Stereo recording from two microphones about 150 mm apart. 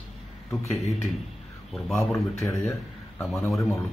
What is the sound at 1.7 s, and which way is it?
Speech, centre (ahead or behind).